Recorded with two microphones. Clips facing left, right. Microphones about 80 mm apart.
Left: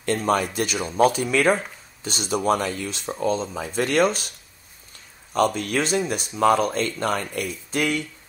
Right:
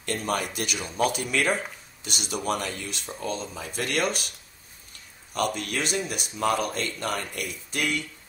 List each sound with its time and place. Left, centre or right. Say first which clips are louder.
0.0 s speech: left 6 dB; left
5.3 s speech: left 6 dB; left